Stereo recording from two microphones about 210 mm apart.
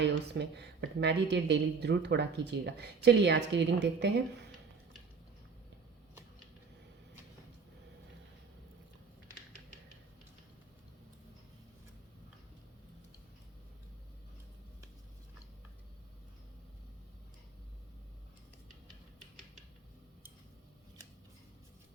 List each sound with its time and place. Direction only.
0.0 s a woman's voice: 55° right (ahead or behind)